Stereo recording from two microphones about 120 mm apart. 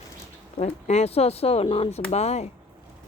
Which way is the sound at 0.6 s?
70° left (ahead or behind).